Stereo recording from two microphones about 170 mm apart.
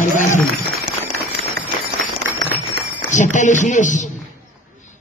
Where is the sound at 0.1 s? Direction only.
50° left (ahead or behind).